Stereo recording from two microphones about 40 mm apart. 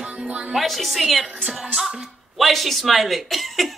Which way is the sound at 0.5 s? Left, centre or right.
Centre.